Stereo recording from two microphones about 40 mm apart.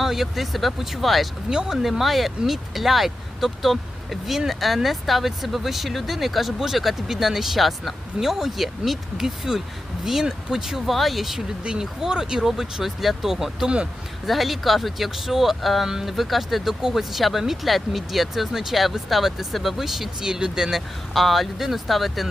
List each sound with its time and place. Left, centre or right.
0.0 s speech: centre
1.5 s speech: centre
11.3 s speech: centre
21.1 s speech: centre